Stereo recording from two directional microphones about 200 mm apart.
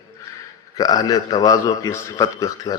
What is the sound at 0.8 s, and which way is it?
A man's voice, 20° left (ahead or behind).